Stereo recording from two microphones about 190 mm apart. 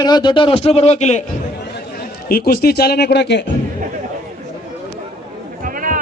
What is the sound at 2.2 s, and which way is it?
A man's voice, 55° left (ahead or behind).